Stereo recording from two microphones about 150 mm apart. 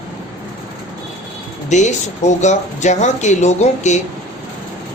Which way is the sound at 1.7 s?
50° left (ahead or behind).